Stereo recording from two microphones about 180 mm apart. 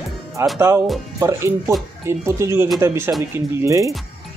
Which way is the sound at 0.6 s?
15° right (ahead or behind).